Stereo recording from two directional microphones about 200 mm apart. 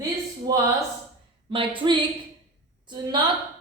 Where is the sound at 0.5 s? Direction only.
20° right (ahead or behind).